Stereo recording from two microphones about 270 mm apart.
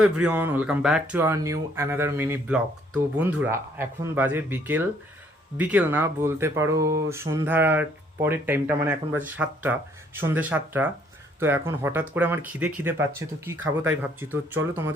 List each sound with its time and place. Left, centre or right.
0.0 s speech: centre